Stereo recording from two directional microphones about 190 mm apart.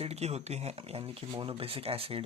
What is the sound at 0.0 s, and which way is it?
Speech, 35° right (ahead or behind).